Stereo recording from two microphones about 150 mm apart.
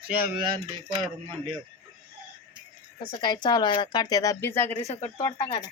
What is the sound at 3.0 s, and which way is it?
A woman's voice, 30° left (ahead or behind).